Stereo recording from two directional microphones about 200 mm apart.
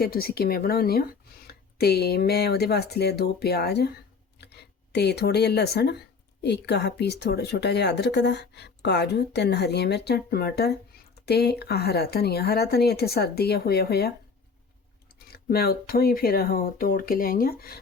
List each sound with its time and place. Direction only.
0.0 s speech: 50° left (ahead or behind)
15.3 s speech: 50° left (ahead or behind)